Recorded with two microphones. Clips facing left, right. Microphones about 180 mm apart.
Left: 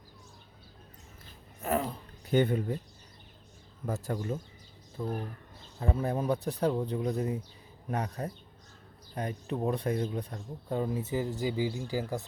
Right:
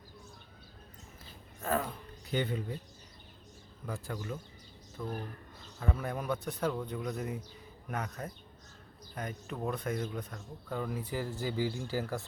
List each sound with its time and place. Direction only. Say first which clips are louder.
1.6 s speech: left 2 dB; 20° left (ahead or behind)
2.3 s speech: left 7 dB; 50° left (ahead or behind)
3.8 s speech: left 6 dB; 40° left (ahead or behind)
5.0 s speech: left 4 dB; 25° left (ahead or behind)